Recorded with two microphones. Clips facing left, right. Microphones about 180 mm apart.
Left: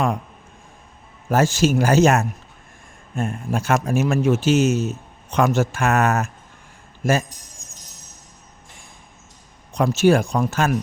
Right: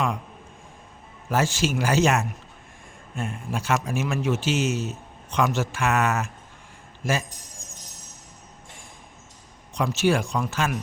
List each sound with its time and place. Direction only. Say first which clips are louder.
1.3 s speech: left 6 dB; 45° left (ahead or behind)
9.7 s speech: left 6 dB; 45° left (ahead or behind)